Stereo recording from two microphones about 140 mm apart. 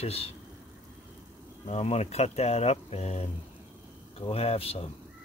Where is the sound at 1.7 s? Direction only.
50° left (ahead or behind).